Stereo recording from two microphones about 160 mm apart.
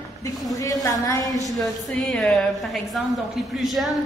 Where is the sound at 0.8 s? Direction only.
20° left (ahead or behind).